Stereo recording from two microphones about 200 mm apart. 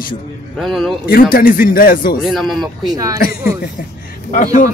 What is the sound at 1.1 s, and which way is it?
A man's voice, 45° left (ahead or behind).